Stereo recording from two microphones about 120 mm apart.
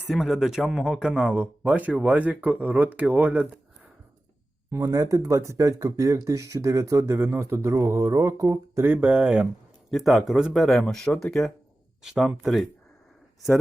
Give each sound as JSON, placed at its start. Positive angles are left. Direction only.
{"t": 0.1, "sound": "speech", "side_deg": 0}
{"t": 4.7, "sound": "speech", "side_deg": -25}
{"t": 9.9, "sound": "speech", "side_deg": 0}